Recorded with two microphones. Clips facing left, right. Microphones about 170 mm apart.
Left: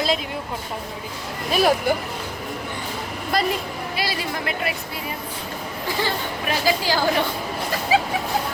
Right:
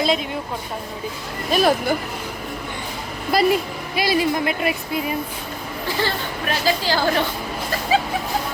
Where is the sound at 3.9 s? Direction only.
15° right (ahead or behind).